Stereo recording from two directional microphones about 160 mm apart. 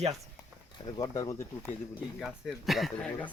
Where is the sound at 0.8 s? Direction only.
25° left (ahead or behind).